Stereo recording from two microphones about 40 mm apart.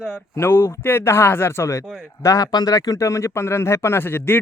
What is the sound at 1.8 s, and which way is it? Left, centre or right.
Speech, centre.